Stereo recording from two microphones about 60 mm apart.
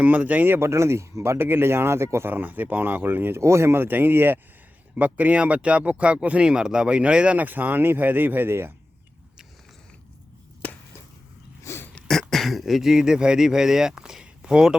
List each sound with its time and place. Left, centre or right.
0.0 s speech: right
0.6 s speech: right
1.4 s speech: right
2.3 s speech: right
4.9 s speech: right
7.3 s speech: right
11.7 s throat clearing: left
12.3 s speech: centre